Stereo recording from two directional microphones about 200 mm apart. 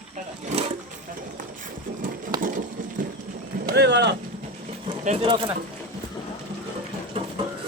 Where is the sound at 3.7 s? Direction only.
55° right (ahead or behind).